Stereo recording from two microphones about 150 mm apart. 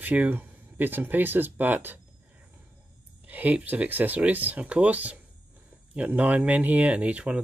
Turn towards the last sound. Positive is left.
turn(degrees=-10)  # may be behind; listen again after turning